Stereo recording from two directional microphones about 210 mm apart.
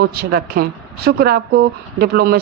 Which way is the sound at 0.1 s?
45° right (ahead or behind).